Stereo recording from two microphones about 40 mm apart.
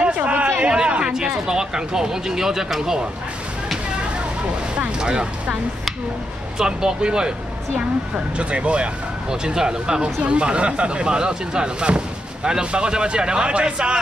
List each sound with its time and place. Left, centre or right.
0.0 s a sound: right
1.1 s speech: centre
4.7 s speech: right
6.6 s speech: centre
8.4 s speech: right
9.3 s speech: centre